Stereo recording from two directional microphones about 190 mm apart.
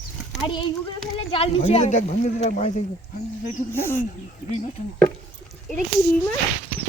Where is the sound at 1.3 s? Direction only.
30° left (ahead or behind).